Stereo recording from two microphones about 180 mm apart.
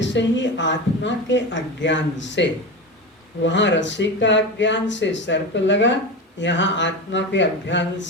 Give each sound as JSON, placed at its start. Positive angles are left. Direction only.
{"t": 0.0, "sound": "speech", "side_deg": 85}